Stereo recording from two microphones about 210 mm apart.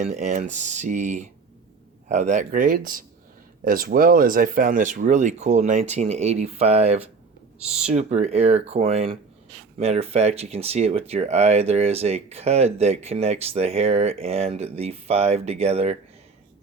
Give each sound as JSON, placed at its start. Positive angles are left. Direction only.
{"t": 0.0, "sound": "speech", "side_deg": -35}